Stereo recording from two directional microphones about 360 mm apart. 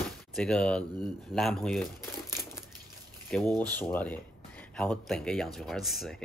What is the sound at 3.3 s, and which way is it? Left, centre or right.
A man's voice, centre.